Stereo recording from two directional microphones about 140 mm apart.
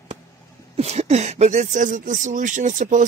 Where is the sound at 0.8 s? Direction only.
50° right (ahead or behind).